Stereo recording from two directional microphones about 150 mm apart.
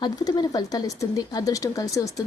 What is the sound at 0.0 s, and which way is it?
A woman's voice, 30° left (ahead or behind).